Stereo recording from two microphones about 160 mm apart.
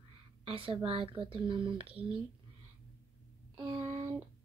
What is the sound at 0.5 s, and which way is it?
Speech, 35° right (ahead or behind).